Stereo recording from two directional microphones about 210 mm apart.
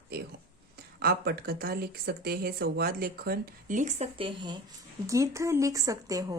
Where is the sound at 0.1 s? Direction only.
45° right (ahead or behind).